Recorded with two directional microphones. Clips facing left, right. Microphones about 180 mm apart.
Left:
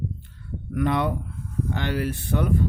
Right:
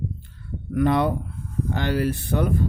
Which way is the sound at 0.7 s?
35° right (ahead or behind).